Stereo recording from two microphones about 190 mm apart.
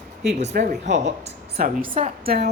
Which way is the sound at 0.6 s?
40° right (ahead or behind).